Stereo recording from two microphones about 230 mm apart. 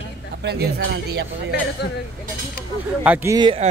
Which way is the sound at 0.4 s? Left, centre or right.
Right.